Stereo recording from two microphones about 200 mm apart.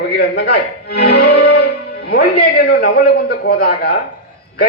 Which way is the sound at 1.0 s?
50° left (ahead or behind).